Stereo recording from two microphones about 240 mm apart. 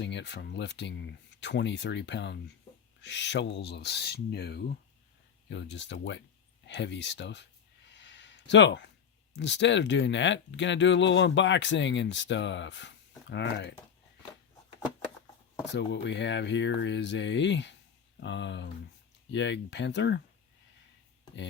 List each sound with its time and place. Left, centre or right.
0.0 s speech: left
7.9 s a sound: left
9.3 s speech: left
15.7 s speech: left